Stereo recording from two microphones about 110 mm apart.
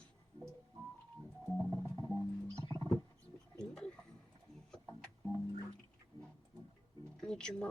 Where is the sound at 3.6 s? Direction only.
5° left (ahead or behind).